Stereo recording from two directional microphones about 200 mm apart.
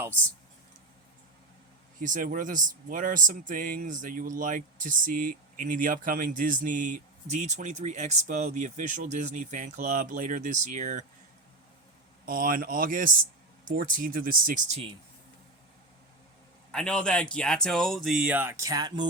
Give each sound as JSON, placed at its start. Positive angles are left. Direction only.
{"t": 2.0, "sound": "speech", "side_deg": -40}
{"t": 12.2, "sound": "speech", "side_deg": -45}
{"t": 16.7, "sound": "speech", "side_deg": 5}